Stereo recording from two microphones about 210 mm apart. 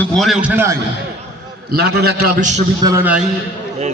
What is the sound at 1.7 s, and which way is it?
Speech, 50° right (ahead or behind).